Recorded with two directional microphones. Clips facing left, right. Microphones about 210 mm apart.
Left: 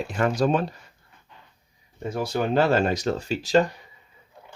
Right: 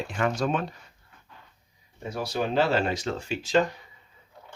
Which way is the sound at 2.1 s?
50° left (ahead or behind).